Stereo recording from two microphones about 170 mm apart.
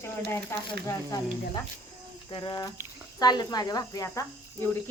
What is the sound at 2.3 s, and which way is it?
Speech, 25° left (ahead or behind).